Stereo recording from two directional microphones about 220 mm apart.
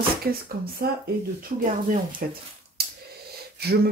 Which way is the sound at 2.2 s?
40° right (ahead or behind).